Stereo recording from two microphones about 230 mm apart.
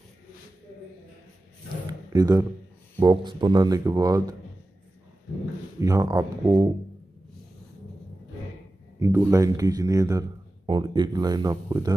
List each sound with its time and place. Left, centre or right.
1.9 s a sound: centre
3.0 s speech: centre
5.8 s speech: centre
9.0 s speech: centre